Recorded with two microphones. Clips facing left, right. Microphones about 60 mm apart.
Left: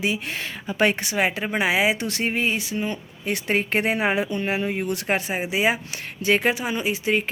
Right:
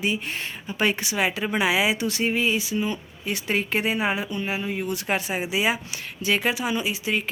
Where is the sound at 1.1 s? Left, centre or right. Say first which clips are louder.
Left 1 dB; left.